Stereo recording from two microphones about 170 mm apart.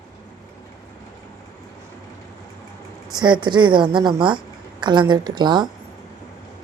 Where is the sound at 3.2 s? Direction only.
25° right (ahead or behind).